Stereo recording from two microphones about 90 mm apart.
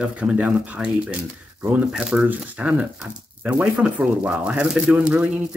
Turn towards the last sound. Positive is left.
turn(degrees=-15)  # may be behind; listen again after turning